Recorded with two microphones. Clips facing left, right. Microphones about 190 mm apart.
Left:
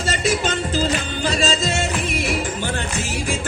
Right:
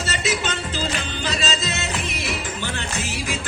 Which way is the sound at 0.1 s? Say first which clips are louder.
Left 5 dB; 45° left (ahead or behind).